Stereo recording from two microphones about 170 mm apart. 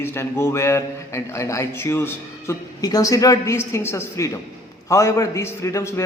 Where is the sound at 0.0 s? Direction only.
15° left (ahead or behind).